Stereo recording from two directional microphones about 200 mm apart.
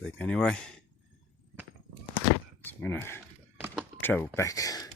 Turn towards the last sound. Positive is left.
turn(degrees=15)  # may be behind; listen again after turning